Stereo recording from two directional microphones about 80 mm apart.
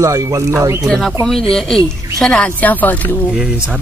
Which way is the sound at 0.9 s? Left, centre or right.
Centre.